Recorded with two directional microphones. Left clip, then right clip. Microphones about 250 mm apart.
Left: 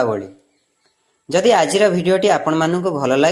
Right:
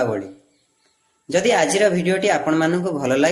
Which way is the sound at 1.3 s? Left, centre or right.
Left.